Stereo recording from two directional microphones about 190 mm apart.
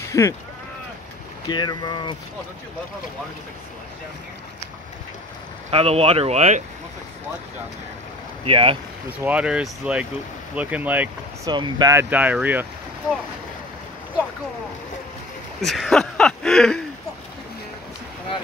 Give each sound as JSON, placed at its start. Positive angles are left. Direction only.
{"t": 0.1, "sound": "speech", "side_deg": 15}
{"t": 1.5, "sound": "speech", "side_deg": 20}
{"t": 5.7, "sound": "speech", "side_deg": -30}
{"t": 8.5, "sound": "speech", "side_deg": -30}
{"t": 9.2, "sound": "speech", "side_deg": -5}
{"t": 15.6, "sound": "speech", "side_deg": 0}